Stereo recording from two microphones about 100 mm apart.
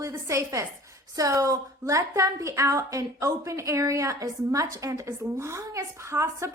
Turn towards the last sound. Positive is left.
turn(degrees=-30)  # may be behind; listen again after turning